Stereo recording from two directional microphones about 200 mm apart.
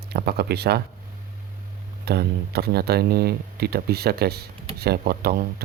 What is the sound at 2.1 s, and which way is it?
Speech, 50° right (ahead or behind).